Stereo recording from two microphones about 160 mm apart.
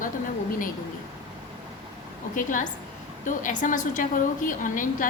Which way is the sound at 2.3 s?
55° left (ahead or behind).